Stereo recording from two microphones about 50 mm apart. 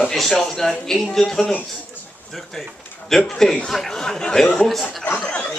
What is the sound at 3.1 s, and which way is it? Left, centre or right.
A man's voice, centre.